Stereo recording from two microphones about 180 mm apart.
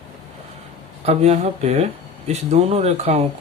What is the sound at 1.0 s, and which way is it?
Speech, 35° right (ahead or behind).